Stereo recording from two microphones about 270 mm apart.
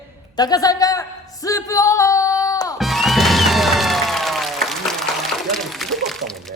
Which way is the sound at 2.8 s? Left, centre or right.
Centre.